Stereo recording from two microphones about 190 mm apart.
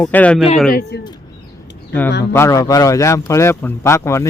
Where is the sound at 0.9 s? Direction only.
60° left (ahead or behind).